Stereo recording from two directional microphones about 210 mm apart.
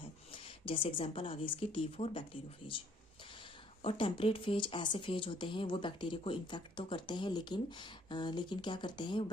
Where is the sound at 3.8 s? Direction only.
25° left (ahead or behind).